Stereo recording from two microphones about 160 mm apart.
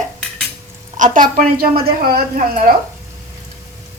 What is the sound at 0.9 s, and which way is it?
A woman's voice, 55° right (ahead or behind).